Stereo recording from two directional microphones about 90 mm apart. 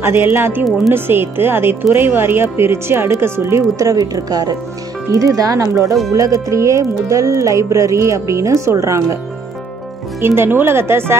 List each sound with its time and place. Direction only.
0.0 s speech: 25° right (ahead or behind)
10.2 s speech: 25° right (ahead or behind)